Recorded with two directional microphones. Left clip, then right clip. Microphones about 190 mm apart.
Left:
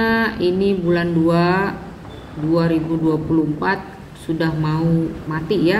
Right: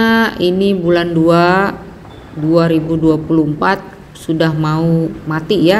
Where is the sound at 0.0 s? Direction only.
40° right (ahead or behind).